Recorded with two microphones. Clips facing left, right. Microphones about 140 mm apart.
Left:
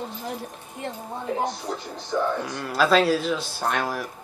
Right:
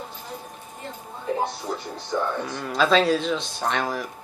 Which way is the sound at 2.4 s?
5° left (ahead or behind).